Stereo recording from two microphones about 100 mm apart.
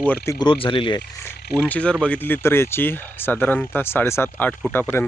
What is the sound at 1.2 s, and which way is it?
Speech, 15° left (ahead or behind).